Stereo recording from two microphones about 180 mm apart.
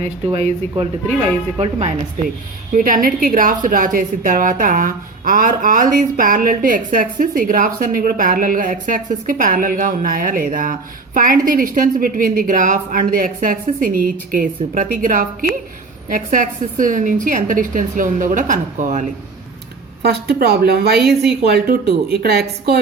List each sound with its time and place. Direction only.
0.3 s speech: 35° right (ahead or behind)
2.7 s a woman's voice: 50° right (ahead or behind)
20.0 s speech: 65° right (ahead or behind)